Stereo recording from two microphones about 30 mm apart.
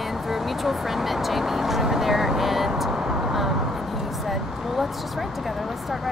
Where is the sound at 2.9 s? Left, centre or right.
Right.